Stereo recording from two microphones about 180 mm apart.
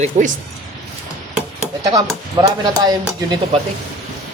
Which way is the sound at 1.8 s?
20° right (ahead or behind).